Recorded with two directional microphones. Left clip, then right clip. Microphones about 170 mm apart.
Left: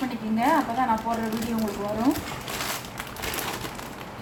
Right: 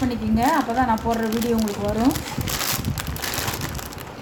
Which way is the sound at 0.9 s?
60° right (ahead or behind).